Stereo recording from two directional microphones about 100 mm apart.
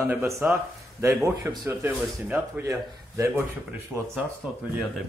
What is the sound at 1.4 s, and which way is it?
Speech, 20° right (ahead or behind).